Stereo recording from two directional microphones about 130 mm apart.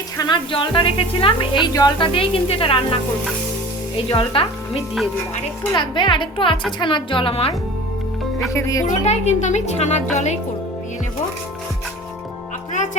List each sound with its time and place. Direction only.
0.2 s speech: 35° left (ahead or behind)
1.7 s speech: 30° left (ahead or behind)
2.1 s speech: 45° left (ahead or behind)
4.1 s speech: 45° left (ahead or behind)
8.5 s speech: 25° left (ahead or behind)
8.9 s speech: 60° left (ahead or behind)
12.7 s music: 70° left (ahead or behind)